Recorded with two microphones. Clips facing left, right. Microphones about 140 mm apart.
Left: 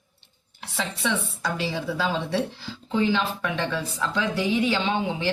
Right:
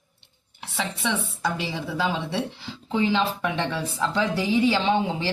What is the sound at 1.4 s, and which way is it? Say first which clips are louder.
Speech: left 1 dB; 20° right (ahead or behind).